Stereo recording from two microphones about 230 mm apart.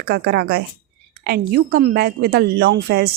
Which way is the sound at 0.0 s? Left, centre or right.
Right.